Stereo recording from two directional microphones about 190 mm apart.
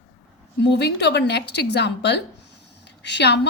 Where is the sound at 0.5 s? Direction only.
60° left (ahead or behind).